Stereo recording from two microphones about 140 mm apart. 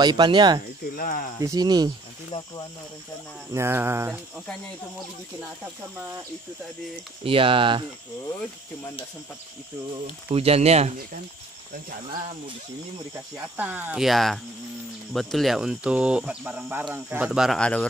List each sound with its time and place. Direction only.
0.0 s speech: 30° right (ahead or behind)
0.9 s speech: 85° left
1.4 s speech: 25° right (ahead or behind)
3.5 s speech: 15° right (ahead or behind)
7.2 s speech: 40° right (ahead or behind)
10.3 s speech: 45° right (ahead or behind)
13.6 s speech: 10° right (ahead or behind)
14.0 s speech: centre (ahead or behind)
17.6 s a man's voice: 5° left (ahead or behind)